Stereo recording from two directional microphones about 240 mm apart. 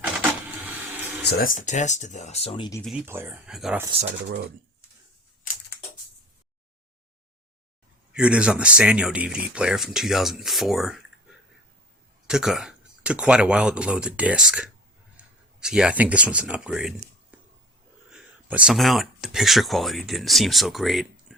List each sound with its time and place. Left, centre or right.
1.2 s speech: left; by 2.8 s centre
2.8 s speech: centre
8.1 s speech: centre
17.3 s a sound: centre
18.1 s speech: centre